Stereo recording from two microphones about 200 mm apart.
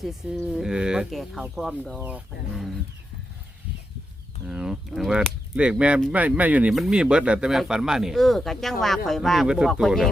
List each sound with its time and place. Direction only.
0.0 s speech: centre (ahead or behind)
4.4 s speech: 5° right (ahead or behind)